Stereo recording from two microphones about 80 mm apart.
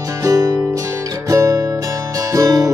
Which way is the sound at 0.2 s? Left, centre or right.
Right.